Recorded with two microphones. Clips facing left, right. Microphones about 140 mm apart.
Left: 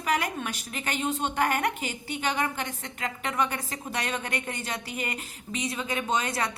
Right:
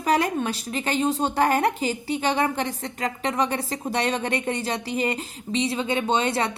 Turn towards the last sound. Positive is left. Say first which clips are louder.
# right 5 dB
turn(degrees=-30)  # may be behind; listen again after turning